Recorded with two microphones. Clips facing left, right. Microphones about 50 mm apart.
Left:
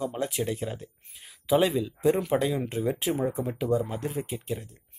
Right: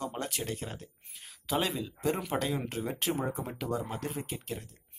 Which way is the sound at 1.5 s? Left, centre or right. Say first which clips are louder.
Left 8 dB; centre.